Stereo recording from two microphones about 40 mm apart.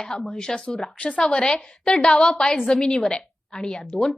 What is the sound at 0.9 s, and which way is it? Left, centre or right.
Speech, left.